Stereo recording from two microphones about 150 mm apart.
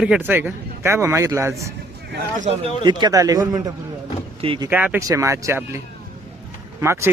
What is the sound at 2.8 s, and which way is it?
Speech, 30° right (ahead or behind).